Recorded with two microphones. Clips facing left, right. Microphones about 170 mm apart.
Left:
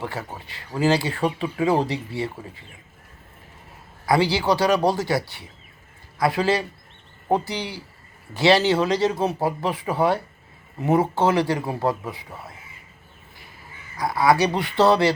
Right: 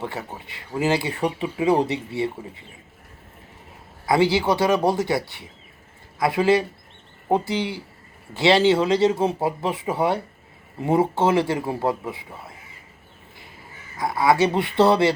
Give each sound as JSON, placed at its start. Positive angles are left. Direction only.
{"t": 0.0, "sound": "speech", "side_deg": -20}
{"t": 4.0, "sound": "speech", "side_deg": -20}
{"t": 13.9, "sound": "speech", "side_deg": -25}